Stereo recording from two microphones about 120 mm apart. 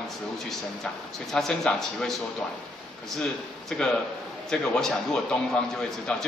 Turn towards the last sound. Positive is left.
turn(degrees=5)  # may be behind; listen again after turning